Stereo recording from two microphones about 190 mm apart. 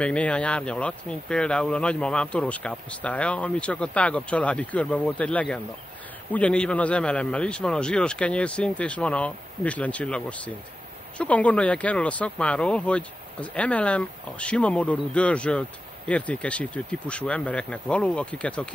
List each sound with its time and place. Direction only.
0.0 s speech: 5° left (ahead or behind)